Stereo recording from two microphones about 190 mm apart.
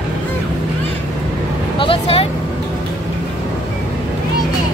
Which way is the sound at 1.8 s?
30° left (ahead or behind).